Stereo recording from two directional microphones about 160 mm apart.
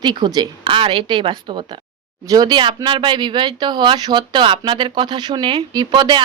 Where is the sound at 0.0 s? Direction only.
30° right (ahead or behind).